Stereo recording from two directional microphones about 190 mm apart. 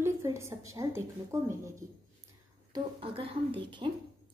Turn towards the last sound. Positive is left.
turn(degrees=-25)  # may be behind; listen again after turning